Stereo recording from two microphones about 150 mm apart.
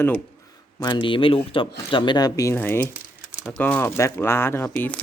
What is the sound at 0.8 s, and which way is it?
Speech, 30° left (ahead or behind).